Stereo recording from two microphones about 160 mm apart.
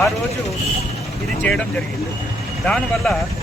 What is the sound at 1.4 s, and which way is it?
Speech, 5° left (ahead or behind).